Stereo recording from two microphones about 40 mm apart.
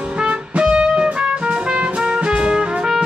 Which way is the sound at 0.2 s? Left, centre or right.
Right.